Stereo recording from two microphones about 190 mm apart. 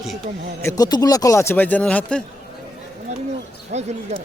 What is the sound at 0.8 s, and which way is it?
Speech, 20° left (ahead or behind).